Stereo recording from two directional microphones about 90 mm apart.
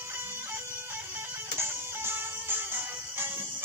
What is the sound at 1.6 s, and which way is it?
Music, 25° right (ahead or behind).